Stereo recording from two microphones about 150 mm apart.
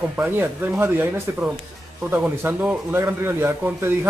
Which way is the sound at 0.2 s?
15° right (ahead or behind).